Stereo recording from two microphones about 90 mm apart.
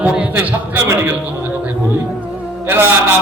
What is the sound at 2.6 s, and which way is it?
Speech, 25° right (ahead or behind).